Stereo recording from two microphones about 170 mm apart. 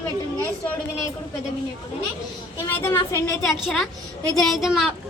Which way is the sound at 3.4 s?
Centre (ahead or behind).